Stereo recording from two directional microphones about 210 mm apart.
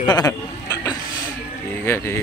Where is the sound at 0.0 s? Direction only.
20° left (ahead or behind).